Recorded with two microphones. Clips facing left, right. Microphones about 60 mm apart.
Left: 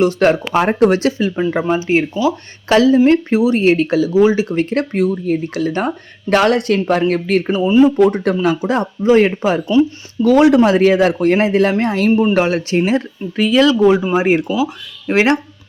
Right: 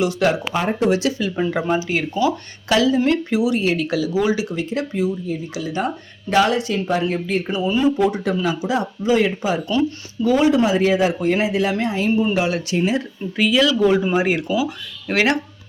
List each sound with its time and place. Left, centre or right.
0.0 s speech: left
0.9 s speech: left
1.5 s speech: left
4.4 s speech: left
7.4 s speech: left
7.9 s speech: left
10.2 s speech: left
11.8 s speech: left
12.3 s speech: left